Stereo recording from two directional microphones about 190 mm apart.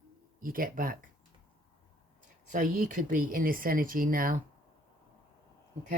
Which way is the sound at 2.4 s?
45° right (ahead or behind).